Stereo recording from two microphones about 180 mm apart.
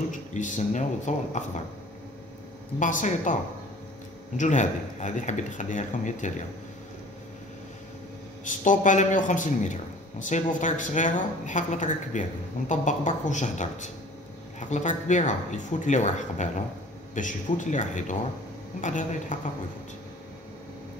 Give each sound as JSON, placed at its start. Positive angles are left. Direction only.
{"t": 0.3, "sound": "speech", "side_deg": 45}
{"t": 2.8, "sound": "a man's voice", "side_deg": 45}
{"t": 4.4, "sound": "a man's voice", "side_deg": 40}
{"t": 8.5, "sound": "a man's voice", "side_deg": 45}